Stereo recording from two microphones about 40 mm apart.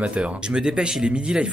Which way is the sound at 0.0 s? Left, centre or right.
Right.